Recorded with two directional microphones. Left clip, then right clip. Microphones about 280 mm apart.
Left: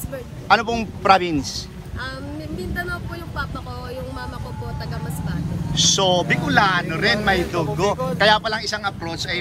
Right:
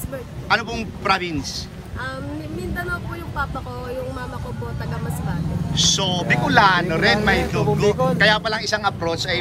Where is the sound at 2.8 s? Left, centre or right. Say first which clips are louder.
Right 1 dB; centre.